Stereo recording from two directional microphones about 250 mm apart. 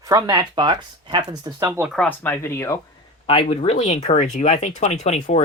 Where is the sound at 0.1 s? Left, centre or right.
Centre.